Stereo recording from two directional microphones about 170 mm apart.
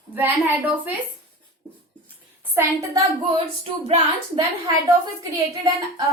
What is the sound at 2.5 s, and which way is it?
Speech, 15° right (ahead or behind).